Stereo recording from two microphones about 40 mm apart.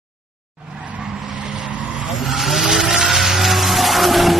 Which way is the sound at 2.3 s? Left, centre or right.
Centre.